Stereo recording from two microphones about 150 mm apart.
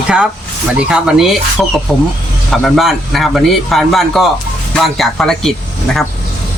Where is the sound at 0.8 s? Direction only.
5° right (ahead or behind).